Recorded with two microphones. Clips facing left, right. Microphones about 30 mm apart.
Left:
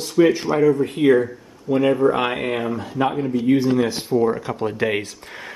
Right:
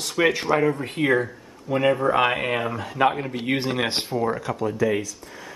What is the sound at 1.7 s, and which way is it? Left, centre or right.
Speech, right.